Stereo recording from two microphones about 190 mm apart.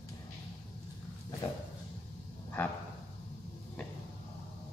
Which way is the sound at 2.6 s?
10° left (ahead or behind).